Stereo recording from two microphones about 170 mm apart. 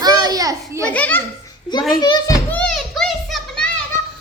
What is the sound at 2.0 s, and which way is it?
Speech, 25° left (ahead or behind).